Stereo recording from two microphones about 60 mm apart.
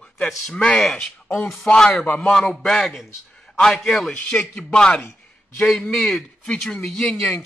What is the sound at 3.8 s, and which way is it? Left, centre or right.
Speech, centre.